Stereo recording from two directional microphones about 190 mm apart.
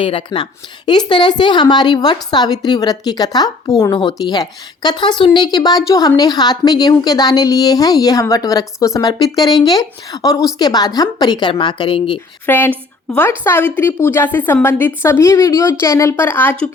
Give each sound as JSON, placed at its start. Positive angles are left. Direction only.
{"t": 0.0, "sound": "a woman's voice", "side_deg": 30}
{"t": 12.5, "sound": "a woman's voice", "side_deg": 10}